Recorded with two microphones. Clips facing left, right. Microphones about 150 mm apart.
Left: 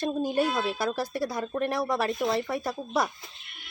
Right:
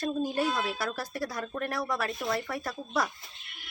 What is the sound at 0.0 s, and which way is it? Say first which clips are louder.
Speech: left 3 dB; 25° left (ahead or behind).